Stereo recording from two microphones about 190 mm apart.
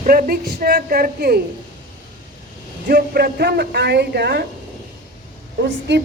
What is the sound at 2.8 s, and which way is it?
A man's voice, 55° right (ahead or behind).